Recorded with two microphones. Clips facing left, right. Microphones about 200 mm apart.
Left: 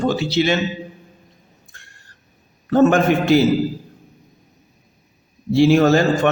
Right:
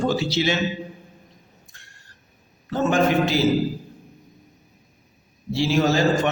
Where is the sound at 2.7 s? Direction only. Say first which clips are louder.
Left 6 dB; 55° left (ahead or behind).